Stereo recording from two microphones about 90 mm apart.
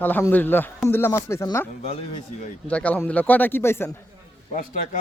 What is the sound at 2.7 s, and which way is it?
Speech, 15° left (ahead or behind).